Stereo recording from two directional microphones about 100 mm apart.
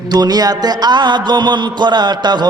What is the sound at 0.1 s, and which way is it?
A man's voice, 40° right (ahead or behind).